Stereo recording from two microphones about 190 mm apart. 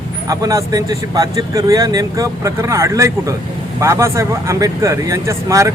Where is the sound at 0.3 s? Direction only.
20° right (ahead or behind).